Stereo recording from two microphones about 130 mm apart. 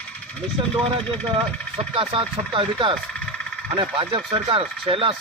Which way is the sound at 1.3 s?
45° right (ahead or behind).